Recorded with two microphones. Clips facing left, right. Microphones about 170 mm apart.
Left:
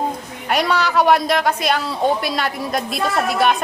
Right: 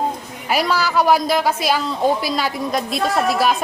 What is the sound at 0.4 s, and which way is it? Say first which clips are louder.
A woman's voice: left 1 dB; centre (ahead or behind).